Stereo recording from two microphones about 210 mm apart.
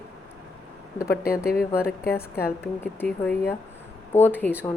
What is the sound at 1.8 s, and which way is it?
Speech, 45° left (ahead or behind).